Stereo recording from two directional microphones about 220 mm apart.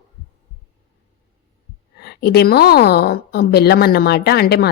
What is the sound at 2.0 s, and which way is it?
A woman's voice, 45° left (ahead or behind).